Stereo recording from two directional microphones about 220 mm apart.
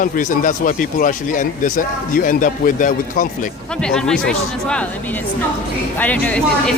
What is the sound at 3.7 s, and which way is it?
Speech, 5° left (ahead or behind).